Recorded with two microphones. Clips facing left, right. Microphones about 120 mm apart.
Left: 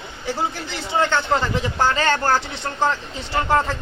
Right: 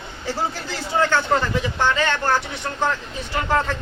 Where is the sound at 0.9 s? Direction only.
20° left (ahead or behind).